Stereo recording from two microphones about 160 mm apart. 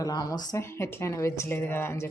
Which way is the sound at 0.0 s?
25° left (ahead or behind).